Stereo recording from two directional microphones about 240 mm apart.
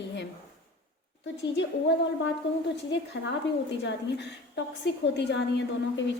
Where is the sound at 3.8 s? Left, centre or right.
Left.